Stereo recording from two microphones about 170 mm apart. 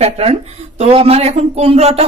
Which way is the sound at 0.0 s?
40° right (ahead or behind).